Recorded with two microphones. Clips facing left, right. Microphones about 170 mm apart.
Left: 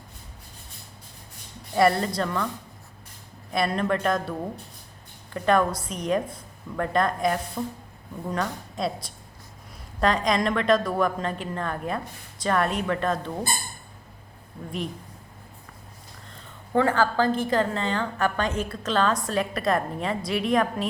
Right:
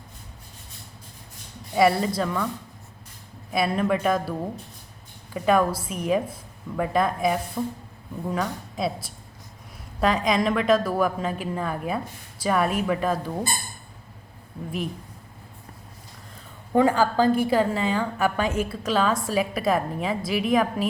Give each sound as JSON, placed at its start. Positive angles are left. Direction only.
{"t": 1.7, "sound": "a woman's voice", "side_deg": -5}
{"t": 3.5, "sound": "a woman's voice", "side_deg": -5}
{"t": 16.7, "sound": "a woman's voice", "side_deg": -15}